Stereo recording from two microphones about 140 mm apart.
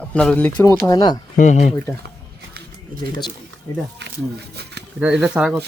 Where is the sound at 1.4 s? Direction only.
55° left (ahead or behind).